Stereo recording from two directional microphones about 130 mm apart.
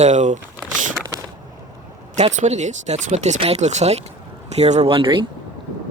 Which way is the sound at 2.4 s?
65° right (ahead or behind).